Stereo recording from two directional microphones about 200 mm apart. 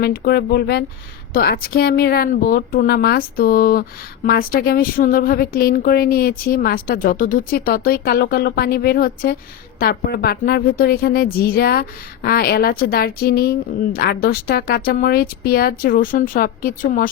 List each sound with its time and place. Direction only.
0.0 s a woman's voice: 50° left (ahead or behind)